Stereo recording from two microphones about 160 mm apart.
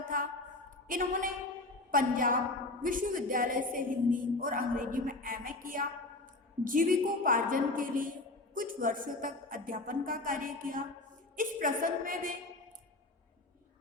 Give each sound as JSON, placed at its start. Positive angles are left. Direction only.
{"t": 0.9, "sound": "a woman's voice", "side_deg": -60}